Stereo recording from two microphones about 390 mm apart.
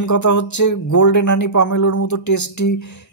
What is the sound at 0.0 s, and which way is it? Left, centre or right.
A man's voice, left.